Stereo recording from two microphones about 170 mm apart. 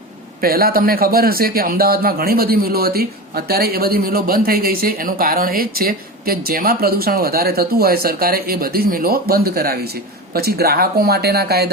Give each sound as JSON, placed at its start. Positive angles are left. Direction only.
{"t": 0.4, "sound": "a man's voice", "side_deg": -60}